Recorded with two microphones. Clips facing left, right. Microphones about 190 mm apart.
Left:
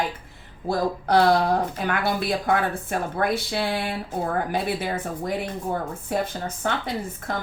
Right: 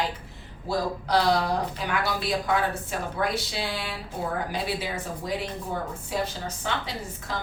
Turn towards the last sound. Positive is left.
turn(degrees=50)  # may be behind; listen again after turning